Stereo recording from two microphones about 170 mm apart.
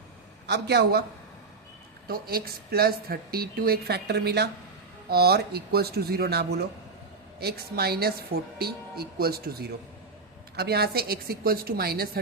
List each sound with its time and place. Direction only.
0.4 s a woman's voice: 85° right
2.0 s a woman's voice: 65° right (ahead or behind)